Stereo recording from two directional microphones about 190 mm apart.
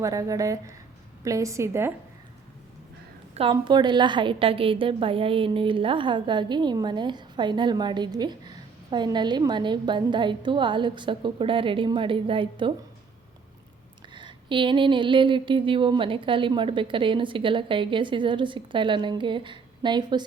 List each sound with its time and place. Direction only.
0.0 s a woman's voice: 15° right (ahead or behind)
3.5 s a woman's voice: 25° right (ahead or behind)
14.1 s a woman's voice: 25° right (ahead or behind)